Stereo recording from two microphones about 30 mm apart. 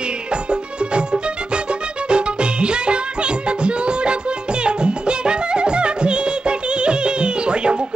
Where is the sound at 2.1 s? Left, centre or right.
Right.